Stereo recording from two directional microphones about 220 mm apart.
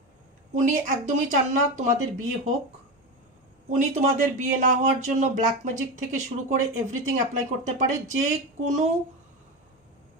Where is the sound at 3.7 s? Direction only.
35° right (ahead or behind).